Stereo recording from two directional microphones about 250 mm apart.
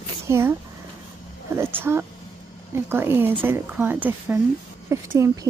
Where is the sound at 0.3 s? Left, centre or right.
Centre.